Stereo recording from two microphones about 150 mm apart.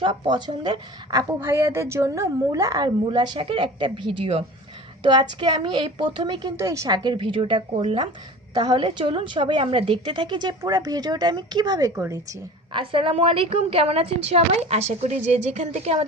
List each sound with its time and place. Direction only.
0.0 s a woman's voice: 30° right (ahead or behind)
1.4 s a woman's voice: 15° right (ahead or behind); by 6.5 s 30° right (ahead or behind)
6.6 s a woman's voice: 20° right (ahead or behind)
12.7 s a woman's voice: 35° right (ahead or behind)